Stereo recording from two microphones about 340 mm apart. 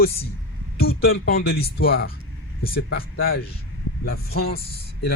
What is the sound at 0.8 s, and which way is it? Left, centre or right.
Speech, left.